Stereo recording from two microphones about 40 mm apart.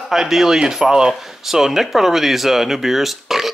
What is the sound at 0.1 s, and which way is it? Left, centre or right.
Speech, centre.